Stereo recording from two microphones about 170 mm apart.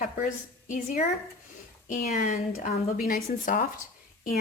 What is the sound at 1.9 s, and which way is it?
A woman's voice, 50° left (ahead or behind).